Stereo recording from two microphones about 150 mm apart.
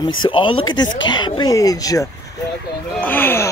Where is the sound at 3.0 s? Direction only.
15° left (ahead or behind).